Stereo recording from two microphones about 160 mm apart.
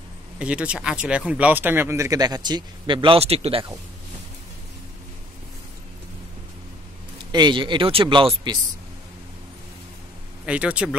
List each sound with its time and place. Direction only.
0.4 s speech: 5° right (ahead or behind); by 3.6 s 40° right (ahead or behind)
7.3 s speech: 30° right (ahead or behind)
10.4 s speech: 10° right (ahead or behind)